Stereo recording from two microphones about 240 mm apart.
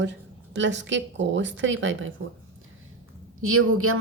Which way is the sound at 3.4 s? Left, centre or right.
Right.